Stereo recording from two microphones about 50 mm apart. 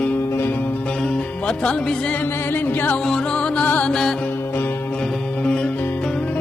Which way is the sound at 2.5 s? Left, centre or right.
Left.